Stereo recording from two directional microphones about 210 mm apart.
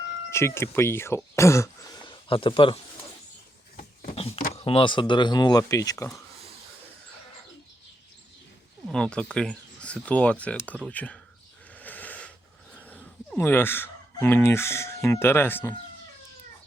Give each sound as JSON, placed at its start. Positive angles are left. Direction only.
{"t": 0.3, "sound": "speech", "side_deg": 10}
{"t": 2.3, "sound": "speech", "side_deg": 25}
{"t": 4.1, "sound": "a sound", "side_deg": 30}
{"t": 4.5, "sound": "speech", "side_deg": 25}
{"t": 8.9, "sound": "speech", "side_deg": 5}
{"t": 11.7, "sound": "sheep", "side_deg": 10}
{"t": 12.7, "sound": "speech", "side_deg": 5}